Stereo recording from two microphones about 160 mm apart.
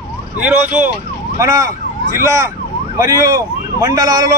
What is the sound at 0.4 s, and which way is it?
Speech, 10° right (ahead or behind).